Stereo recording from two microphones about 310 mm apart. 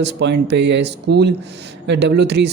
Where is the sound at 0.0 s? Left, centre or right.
Right.